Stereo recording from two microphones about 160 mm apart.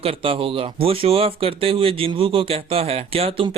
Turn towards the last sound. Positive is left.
turn(degrees=-40)  # may be behind; listen again after turning